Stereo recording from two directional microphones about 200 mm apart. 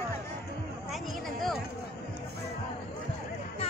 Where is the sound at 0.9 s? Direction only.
Centre (ahead or behind).